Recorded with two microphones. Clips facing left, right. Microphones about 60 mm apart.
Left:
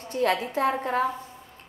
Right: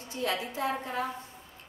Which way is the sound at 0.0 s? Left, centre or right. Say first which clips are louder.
Left 7 dB; left.